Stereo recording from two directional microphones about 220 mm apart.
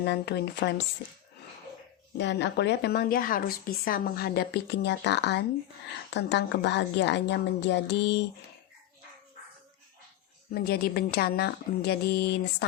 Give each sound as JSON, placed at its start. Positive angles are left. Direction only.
{"t": 0.0, "sound": "a woman's voice", "side_deg": 50}
{"t": 2.1, "sound": "a woman's voice", "side_deg": 50}
{"t": 10.5, "sound": "a woman's voice", "side_deg": 45}